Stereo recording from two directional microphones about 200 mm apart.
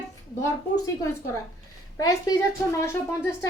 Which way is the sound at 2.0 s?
15° left (ahead or behind).